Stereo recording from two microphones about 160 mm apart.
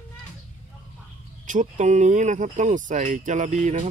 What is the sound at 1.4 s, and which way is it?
Speech, 50° right (ahead or behind).